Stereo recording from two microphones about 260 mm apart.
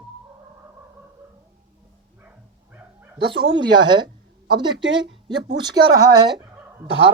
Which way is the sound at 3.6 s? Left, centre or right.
Centre.